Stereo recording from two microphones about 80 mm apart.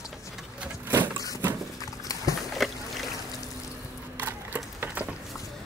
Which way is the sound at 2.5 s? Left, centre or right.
Centre.